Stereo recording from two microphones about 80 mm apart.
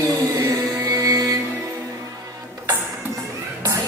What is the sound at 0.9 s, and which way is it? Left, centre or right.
Music, right.